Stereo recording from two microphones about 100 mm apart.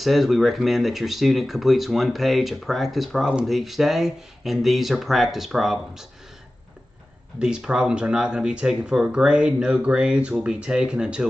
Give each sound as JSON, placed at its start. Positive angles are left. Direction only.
{"t": 0.0, "sound": "speech", "side_deg": 0}
{"t": 7.3, "sound": "speech", "side_deg": -10}